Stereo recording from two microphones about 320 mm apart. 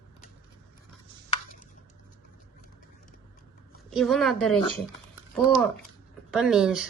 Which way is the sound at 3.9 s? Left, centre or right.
Centre.